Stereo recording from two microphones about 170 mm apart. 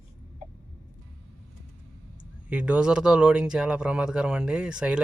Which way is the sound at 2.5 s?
5° right (ahead or behind).